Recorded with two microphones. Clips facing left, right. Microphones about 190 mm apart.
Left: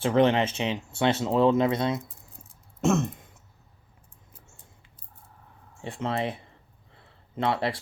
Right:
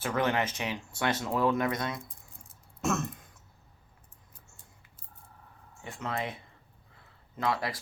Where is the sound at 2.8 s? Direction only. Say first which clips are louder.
Left 7 dB; 25° left (ahead or behind).